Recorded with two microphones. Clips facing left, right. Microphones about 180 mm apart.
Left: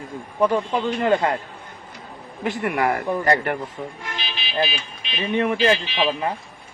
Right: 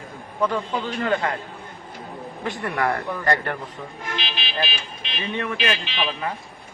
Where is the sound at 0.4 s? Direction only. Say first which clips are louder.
Left 4 dB; 25° left (ahead or behind).